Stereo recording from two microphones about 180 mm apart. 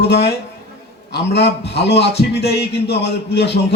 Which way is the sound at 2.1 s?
65° left (ahead or behind).